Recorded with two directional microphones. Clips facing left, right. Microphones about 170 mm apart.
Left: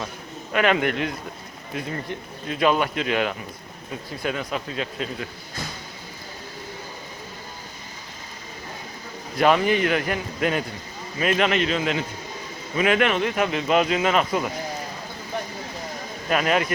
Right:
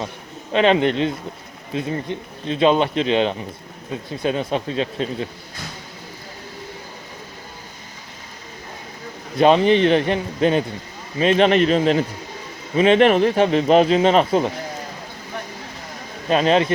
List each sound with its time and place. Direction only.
0.5 s a man's voice: 25° right (ahead or behind)
9.4 s a man's voice: 25° right (ahead or behind)
16.3 s a man's voice: 25° right (ahead or behind)